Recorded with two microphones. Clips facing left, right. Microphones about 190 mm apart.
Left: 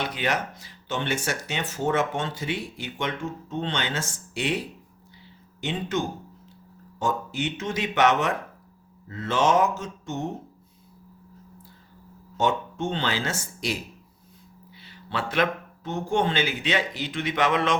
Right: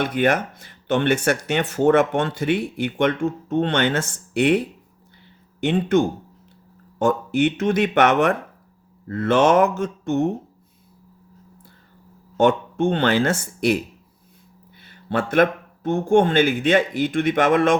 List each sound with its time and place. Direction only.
0.0 s speech: 55° right (ahead or behind)
12.4 s speech: 60° right (ahead or behind)
14.8 s speech: 50° right (ahead or behind)